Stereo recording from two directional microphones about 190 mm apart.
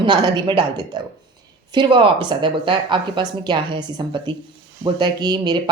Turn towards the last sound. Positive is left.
turn(degrees=-20)  # may be behind; listen again after turning